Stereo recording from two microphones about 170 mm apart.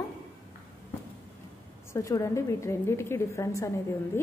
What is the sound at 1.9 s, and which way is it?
A woman's voice, 20° left (ahead or behind).